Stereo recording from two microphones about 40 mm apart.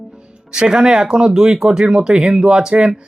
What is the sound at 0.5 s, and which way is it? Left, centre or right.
Speech, centre.